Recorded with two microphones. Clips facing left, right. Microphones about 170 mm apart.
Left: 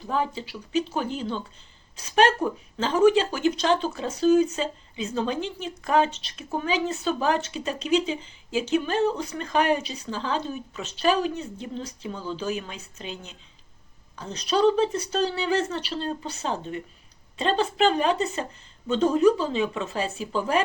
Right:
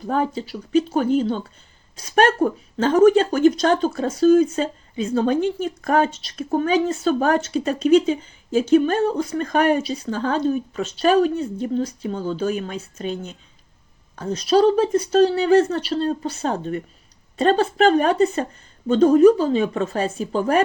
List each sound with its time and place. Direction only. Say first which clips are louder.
0.1 s speech: right 5 dB; 45° right (ahead or behind)